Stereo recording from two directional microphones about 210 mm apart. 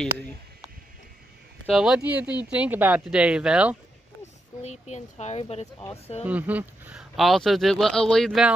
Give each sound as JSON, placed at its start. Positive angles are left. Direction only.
{"t": 1.7, "sound": "a man's voice", "side_deg": 0}
{"t": 4.6, "sound": "speech", "side_deg": 35}
{"t": 6.2, "sound": "a man's voice", "side_deg": -5}